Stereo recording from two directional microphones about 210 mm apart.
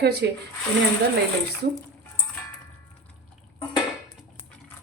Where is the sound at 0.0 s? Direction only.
50° right (ahead or behind).